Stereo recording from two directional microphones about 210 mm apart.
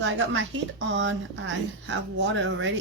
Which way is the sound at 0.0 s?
60° right (ahead or behind).